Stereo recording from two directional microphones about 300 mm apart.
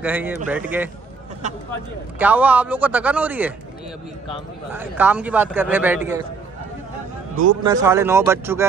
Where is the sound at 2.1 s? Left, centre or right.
Centre.